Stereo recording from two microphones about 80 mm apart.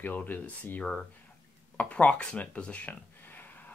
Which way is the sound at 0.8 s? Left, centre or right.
Centre.